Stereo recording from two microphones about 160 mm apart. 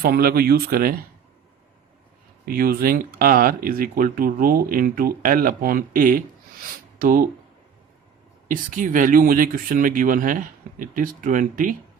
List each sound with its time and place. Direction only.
0.0 s speech: 70° right (ahead or behind)
2.5 s speech: 70° right (ahead or behind)
8.4 s speech: 55° right (ahead or behind)